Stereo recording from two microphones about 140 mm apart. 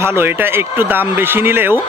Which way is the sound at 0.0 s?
15° right (ahead or behind).